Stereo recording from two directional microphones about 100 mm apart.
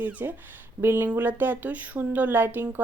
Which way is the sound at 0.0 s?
15° right (ahead or behind).